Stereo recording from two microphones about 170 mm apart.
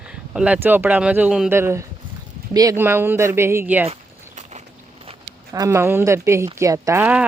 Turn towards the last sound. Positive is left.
turn(degrees=-10)  # may be behind; listen again after turning